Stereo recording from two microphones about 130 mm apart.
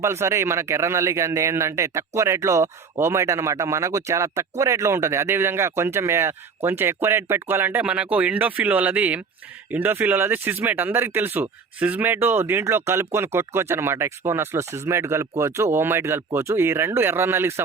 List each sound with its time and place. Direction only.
0.0 s speech: 20° right (ahead or behind)